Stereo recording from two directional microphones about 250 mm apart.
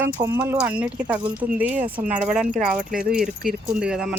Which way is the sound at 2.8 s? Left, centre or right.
Right.